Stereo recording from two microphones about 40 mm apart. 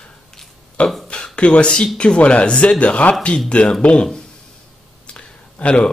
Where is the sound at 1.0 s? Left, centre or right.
Left.